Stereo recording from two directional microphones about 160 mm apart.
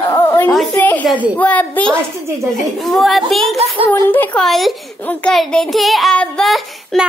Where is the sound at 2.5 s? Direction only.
Centre (ahead or behind).